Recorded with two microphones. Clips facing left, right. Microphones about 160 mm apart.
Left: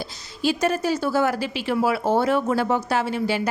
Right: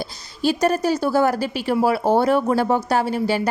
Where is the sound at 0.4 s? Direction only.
40° right (ahead or behind).